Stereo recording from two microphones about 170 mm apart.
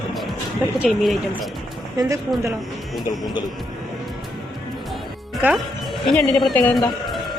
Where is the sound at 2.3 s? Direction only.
Centre (ahead or behind).